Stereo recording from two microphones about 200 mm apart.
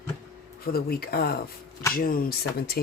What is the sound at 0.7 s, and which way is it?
Speech, 50° left (ahead or behind).